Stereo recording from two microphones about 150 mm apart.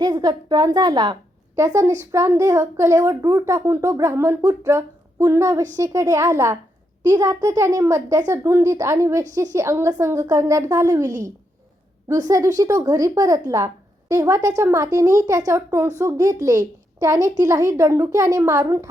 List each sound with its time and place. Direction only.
0.0 s speech: 25° right (ahead or behind)